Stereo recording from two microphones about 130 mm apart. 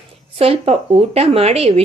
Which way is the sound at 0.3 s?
50° right (ahead or behind).